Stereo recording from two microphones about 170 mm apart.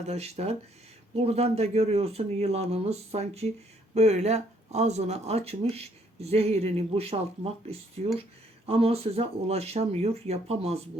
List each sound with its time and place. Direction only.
0.0 s speech: 40° right (ahead or behind)